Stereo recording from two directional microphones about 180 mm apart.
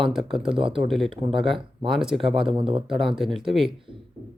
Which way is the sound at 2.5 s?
30° right (ahead or behind).